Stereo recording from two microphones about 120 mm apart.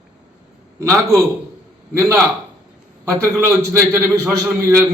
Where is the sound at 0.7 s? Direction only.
25° right (ahead or behind).